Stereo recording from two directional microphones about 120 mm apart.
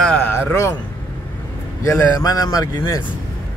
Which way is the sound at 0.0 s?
10° left (ahead or behind).